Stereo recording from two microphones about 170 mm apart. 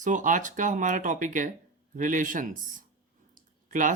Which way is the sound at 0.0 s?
50° right (ahead or behind).